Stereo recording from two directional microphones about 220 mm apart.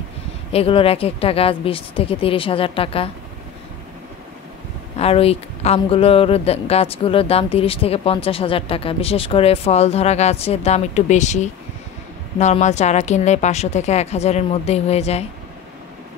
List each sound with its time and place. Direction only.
0.5 s speech: 25° left (ahead or behind)
4.9 s a woman's voice: 25° left (ahead or behind)